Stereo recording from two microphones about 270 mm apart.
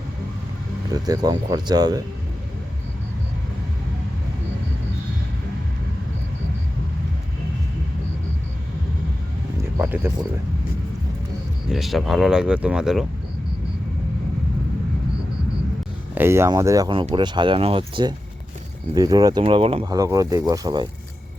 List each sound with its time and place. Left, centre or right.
0.9 s speech: centre
9.6 s music: centre
11.7 s speech: centre
16.1 s speech: centre